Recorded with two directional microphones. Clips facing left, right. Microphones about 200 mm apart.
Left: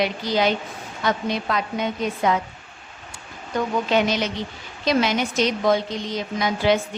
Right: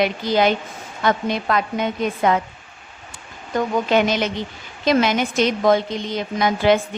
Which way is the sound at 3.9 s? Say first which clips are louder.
Right 3 dB; 50° right (ahead or behind).